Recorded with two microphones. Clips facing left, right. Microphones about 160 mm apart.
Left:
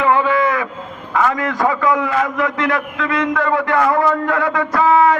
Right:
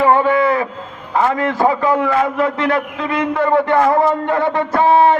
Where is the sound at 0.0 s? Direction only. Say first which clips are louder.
Right 2 dB; 40° right (ahead or behind).